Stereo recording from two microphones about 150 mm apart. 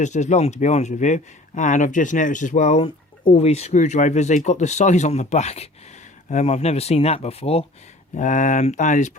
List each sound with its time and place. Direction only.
0.0 s speech: 50° left (ahead or behind)
8.1 s speech: 55° left (ahead or behind)